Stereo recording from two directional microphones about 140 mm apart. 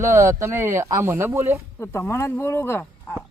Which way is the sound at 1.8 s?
20° left (ahead or behind).